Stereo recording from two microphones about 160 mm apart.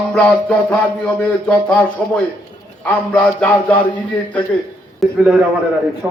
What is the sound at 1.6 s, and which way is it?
Music, 10° left (ahead or behind).